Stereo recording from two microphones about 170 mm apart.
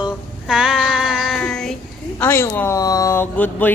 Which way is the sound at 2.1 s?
15° left (ahead or behind).